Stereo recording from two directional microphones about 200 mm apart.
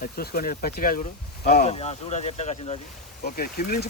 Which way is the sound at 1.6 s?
35° left (ahead or behind).